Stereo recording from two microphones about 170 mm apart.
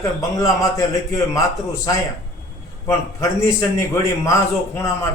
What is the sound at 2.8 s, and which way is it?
A man's voice, 15° left (ahead or behind).